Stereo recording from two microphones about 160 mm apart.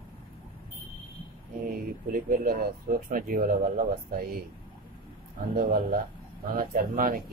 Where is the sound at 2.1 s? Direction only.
65° right (ahead or behind).